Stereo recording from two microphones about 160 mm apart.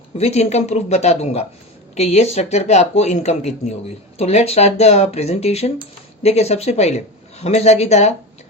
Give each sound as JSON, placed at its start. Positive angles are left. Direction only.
{"t": 0.2, "sound": "a man's voice", "side_deg": 40}